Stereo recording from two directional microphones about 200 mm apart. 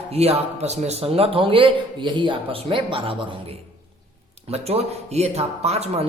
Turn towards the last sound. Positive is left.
turn(degrees=-30)  # may be behind; listen again after turning